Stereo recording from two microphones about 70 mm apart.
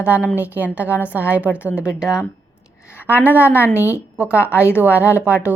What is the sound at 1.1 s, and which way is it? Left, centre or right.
Speech, right.